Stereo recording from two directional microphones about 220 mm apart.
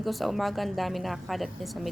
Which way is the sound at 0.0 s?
Centre (ahead or behind).